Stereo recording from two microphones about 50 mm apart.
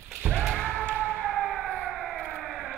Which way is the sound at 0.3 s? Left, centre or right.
Centre.